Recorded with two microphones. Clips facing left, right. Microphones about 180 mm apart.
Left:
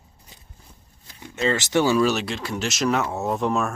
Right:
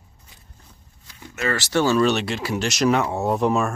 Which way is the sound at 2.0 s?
Centre (ahead or behind).